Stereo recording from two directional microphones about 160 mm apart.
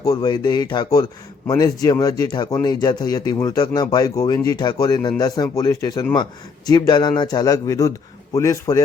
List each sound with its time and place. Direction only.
0.0 s speech: 25° left (ahead or behind)